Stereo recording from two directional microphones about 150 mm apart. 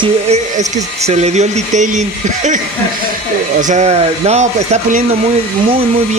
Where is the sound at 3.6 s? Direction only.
50° right (ahead or behind).